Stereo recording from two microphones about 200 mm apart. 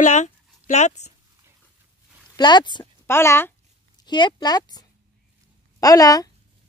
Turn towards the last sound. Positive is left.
turn(degrees=20)  # may be behind; listen again after turning